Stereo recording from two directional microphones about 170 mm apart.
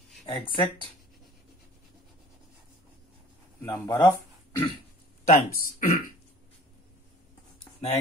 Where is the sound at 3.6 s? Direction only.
20° left (ahead or behind).